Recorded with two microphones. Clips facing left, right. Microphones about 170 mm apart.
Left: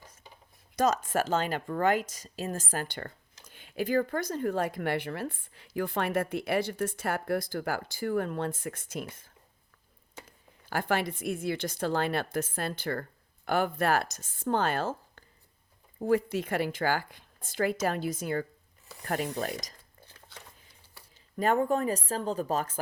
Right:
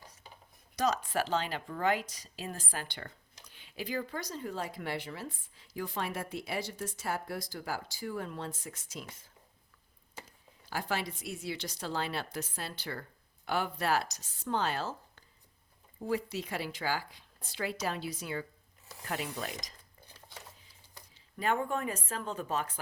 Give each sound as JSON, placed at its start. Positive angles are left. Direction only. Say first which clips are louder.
{"t": 0.8, "sound": "speech", "louder": "left 4 dB", "side_deg": 45}
{"t": 10.7, "sound": "a woman's voice", "louder": "left 6 dB", "side_deg": 55}
{"t": 21.3, "sound": "speech", "louder": "left 6 dB", "side_deg": 40}